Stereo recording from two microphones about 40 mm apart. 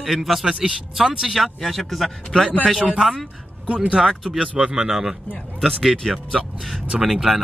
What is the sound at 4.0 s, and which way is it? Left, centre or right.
Speech, centre.